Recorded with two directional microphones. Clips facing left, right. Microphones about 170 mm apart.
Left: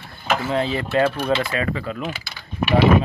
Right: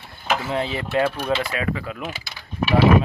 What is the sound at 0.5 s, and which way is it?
Speech, 15° right (ahead or behind).